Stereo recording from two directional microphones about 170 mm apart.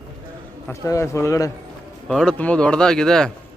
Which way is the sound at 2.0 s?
5° left (ahead or behind).